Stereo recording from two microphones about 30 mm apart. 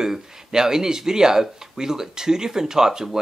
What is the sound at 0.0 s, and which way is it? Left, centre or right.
Speech, right.